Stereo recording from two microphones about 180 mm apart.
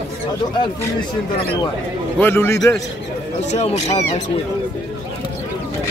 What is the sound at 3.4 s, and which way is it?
Speech, 40° left (ahead or behind).